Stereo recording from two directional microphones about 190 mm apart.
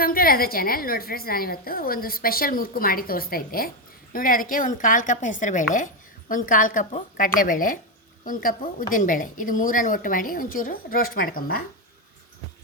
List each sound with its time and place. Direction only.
0.0 s a woman's voice: 50° left (ahead or behind)